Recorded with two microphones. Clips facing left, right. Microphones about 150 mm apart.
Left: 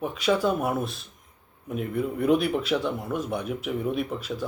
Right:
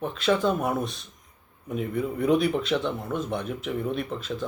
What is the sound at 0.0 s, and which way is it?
Speech, 10° left (ahead or behind).